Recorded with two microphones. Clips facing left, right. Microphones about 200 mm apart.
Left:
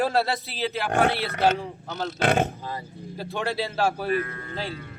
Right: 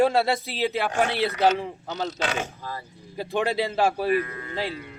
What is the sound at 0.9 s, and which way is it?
Speech, 60° left (ahead or behind).